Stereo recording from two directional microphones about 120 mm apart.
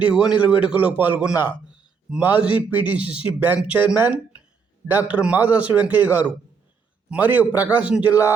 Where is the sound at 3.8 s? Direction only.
10° right (ahead or behind).